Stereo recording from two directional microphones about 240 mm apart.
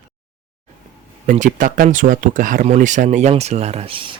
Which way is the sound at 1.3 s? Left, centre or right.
Right.